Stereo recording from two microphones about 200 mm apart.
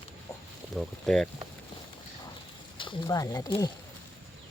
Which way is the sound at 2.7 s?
20° left (ahead or behind).